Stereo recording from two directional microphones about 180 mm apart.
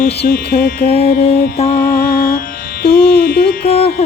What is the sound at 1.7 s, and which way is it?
Music, 50° left (ahead or behind).